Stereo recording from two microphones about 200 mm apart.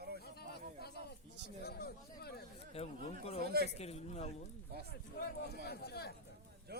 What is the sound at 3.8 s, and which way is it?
Speech, 30° left (ahead or behind).